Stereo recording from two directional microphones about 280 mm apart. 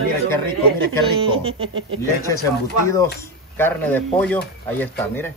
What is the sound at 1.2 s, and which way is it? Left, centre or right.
Speech, centre.